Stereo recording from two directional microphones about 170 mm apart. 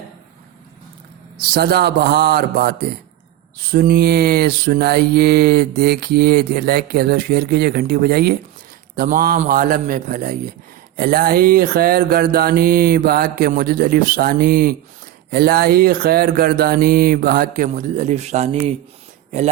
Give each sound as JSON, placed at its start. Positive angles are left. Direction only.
{"t": 1.5, "sound": "mantra", "side_deg": -70}
{"t": 9.0, "sound": "a man's voice", "side_deg": -60}
{"t": 10.9, "sound": "mantra", "side_deg": -60}